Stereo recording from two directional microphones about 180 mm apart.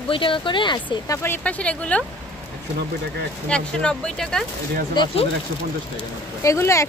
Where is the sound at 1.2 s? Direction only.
10° left (ahead or behind).